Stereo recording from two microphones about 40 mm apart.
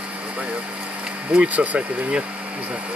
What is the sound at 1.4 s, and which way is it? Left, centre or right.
Speech, right.